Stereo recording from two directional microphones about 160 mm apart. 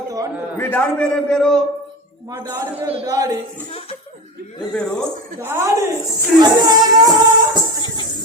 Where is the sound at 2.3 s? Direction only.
25° right (ahead or behind).